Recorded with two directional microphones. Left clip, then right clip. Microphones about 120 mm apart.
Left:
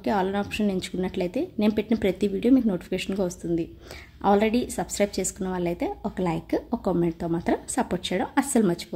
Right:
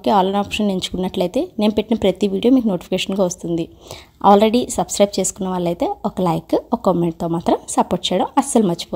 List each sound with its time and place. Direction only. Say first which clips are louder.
0.0 s a woman's voice: right 10 dB; 50° right (ahead or behind)